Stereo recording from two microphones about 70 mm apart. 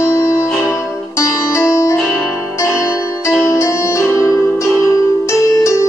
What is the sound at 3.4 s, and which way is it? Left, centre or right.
Music, left.